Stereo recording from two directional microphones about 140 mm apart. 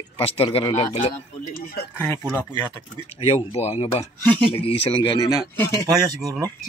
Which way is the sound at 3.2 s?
45° left (ahead or behind).